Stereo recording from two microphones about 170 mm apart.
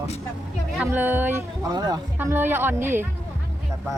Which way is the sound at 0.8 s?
10° right (ahead or behind).